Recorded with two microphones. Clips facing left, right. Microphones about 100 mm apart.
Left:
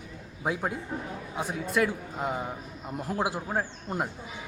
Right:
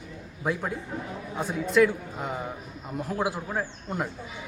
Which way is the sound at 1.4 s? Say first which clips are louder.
Right 5 dB; 5° left (ahead or behind).